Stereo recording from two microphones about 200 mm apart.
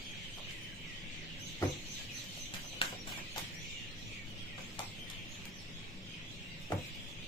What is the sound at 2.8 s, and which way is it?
Music, 25° left (ahead or behind).